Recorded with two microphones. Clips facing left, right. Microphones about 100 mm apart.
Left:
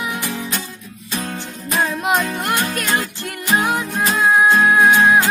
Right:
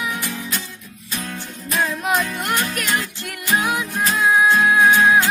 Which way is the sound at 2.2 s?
45° left (ahead or behind).